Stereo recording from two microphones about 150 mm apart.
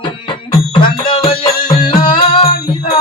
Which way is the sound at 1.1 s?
30° left (ahead or behind).